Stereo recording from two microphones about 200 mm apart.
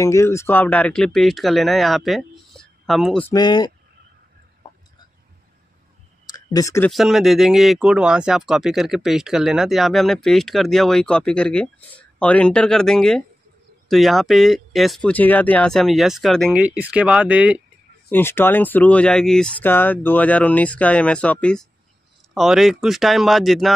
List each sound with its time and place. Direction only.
0.0 s speech: 15° left (ahead or behind)
3.3 s speech: 20° left (ahead or behind)
6.2 s clicking: 20° left (ahead or behind)
6.9 s speech: centre (ahead or behind)
18.1 s speech: 10° left (ahead or behind)